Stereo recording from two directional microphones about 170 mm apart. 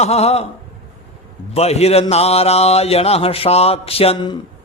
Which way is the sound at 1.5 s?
40° left (ahead or behind).